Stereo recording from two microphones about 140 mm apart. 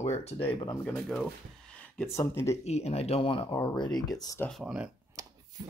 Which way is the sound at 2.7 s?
50° left (ahead or behind).